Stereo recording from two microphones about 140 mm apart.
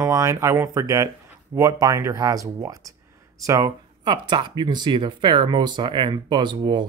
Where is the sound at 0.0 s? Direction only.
25° right (ahead or behind).